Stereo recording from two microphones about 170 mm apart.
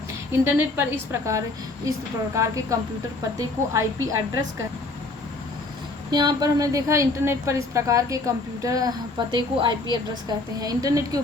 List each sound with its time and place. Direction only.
0.4 s a woman's voice: 15° right (ahead or behind)
6.1 s a woman's voice: 25° right (ahead or behind)